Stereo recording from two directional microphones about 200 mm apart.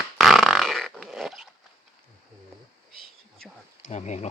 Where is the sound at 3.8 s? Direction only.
35° left (ahead or behind).